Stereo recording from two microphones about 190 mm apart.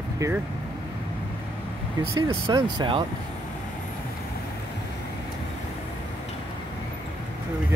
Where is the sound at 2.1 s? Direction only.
25° right (ahead or behind).